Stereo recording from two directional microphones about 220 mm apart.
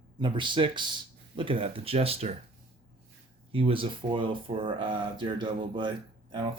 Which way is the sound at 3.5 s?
25° right (ahead or behind).